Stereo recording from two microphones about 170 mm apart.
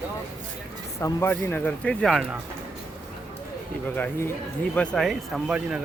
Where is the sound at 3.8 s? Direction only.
10° left (ahead or behind).